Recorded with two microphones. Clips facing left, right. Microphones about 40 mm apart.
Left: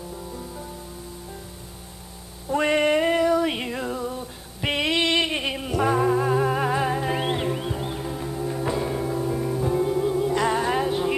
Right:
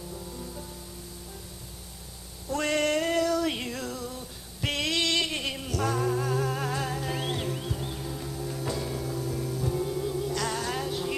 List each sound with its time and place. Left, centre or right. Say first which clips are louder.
2.5 s female singing: left 6 dB; left